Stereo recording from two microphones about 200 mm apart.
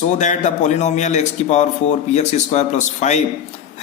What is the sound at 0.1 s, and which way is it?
Speech, 35° left (ahead or behind).